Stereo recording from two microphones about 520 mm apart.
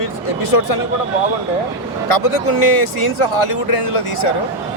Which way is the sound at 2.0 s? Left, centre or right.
Left.